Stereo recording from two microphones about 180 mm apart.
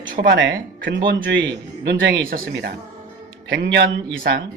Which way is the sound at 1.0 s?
85° right.